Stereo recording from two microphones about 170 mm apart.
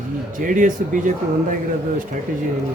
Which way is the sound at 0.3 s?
50° right (ahead or behind).